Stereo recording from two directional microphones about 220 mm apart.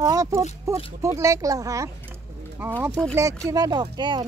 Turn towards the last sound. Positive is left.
turn(degrees=-20)  # may be behind; listen again after turning